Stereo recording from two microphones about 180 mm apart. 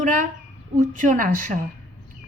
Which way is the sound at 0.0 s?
45° right (ahead or behind).